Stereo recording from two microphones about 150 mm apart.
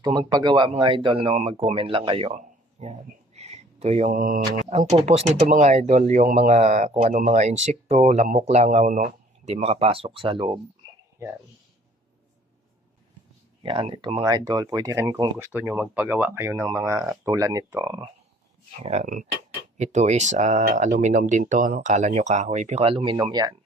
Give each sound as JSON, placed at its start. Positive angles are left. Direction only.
{"t": 0.0, "sound": "speech", "side_deg": -25}
{"t": 2.3, "sound": "a sound", "side_deg": -50}
{"t": 3.3, "sound": "speech", "side_deg": -45}
{"t": 4.7, "sound": "speech", "side_deg": -50}
{"t": 13.6, "sound": "speech", "side_deg": -35}
{"t": 18.8, "sound": "speech", "side_deg": -45}
{"t": 19.0, "sound": "speech", "side_deg": -60}
{"t": 19.7, "sound": "speech", "side_deg": -50}